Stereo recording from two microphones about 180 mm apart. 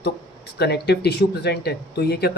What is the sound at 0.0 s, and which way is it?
Speech, 65° left (ahead or behind).